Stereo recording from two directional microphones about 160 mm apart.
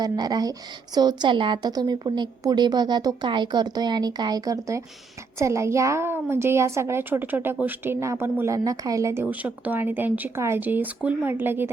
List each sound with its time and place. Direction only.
0.0 s a woman's voice: 25° right (ahead or behind)